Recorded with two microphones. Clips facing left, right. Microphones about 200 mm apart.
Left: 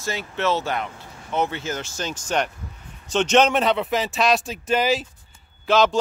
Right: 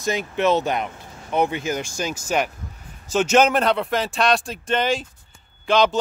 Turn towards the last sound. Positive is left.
turn(degrees=0)  # may be behind; listen again after turning